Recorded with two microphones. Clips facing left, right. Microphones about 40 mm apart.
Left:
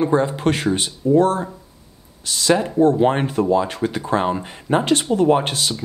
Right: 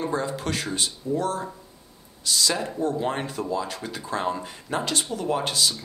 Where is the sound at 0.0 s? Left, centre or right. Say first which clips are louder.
Left 9 dB; left.